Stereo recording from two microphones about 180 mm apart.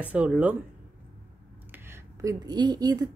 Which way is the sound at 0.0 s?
5° right (ahead or behind).